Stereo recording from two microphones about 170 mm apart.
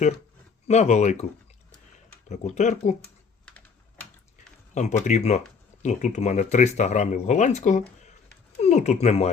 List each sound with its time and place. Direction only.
0.7 s speech: 40° left (ahead or behind)
2.3 s speech: 40° left (ahead or behind)
4.7 s speech: 45° left (ahead or behind)